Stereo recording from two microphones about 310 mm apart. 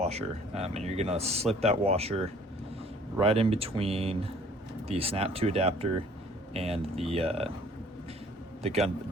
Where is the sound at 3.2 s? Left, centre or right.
Centre.